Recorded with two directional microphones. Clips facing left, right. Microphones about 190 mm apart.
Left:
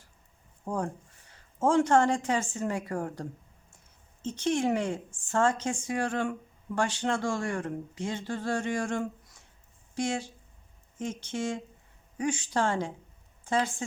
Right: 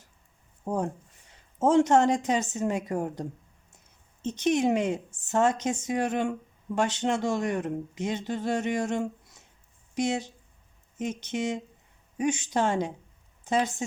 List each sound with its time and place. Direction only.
0.6 s speech: 20° right (ahead or behind)